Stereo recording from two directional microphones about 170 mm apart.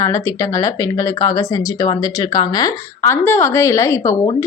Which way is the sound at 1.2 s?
20° left (ahead or behind).